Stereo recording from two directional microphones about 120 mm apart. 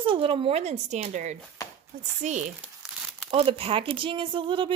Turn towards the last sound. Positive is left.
turn(degrees=-45)  # may be behind; listen again after turning